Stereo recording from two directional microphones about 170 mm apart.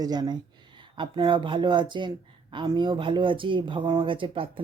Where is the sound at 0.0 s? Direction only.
25° right (ahead or behind).